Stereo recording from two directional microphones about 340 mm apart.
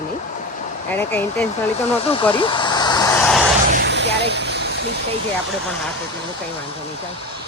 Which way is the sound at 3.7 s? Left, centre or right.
Right.